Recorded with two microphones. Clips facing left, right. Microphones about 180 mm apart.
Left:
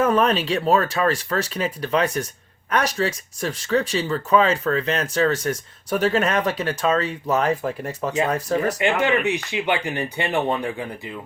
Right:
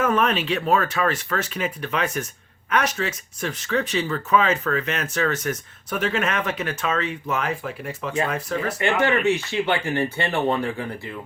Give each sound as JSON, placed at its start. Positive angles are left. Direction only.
{"t": 0.0, "sound": "speech", "side_deg": 35}
{"t": 8.8, "sound": "speech", "side_deg": 15}